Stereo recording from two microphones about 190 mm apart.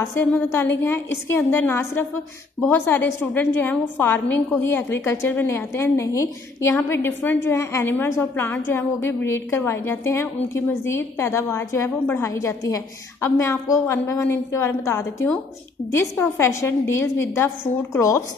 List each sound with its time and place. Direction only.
0.3 s a woman's voice: 10° left (ahead or behind)